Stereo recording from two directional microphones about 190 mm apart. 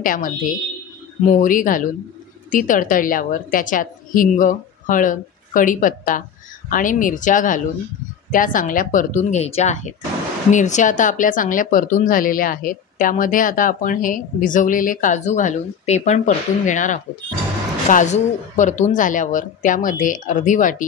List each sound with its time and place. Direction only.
0.0 s a woman's voice: 45° left (ahead or behind)